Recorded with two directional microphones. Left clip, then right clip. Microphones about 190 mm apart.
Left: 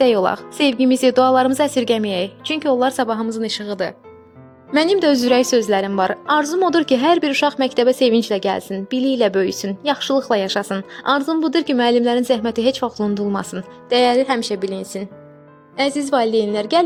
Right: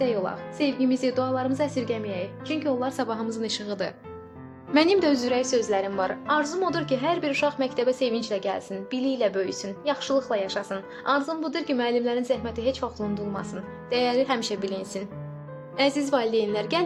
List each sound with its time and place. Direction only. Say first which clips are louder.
0.0 s a woman's voice: left 11 dB; 65° left (ahead or behind); by 16.8 s 35° left (ahead or behind)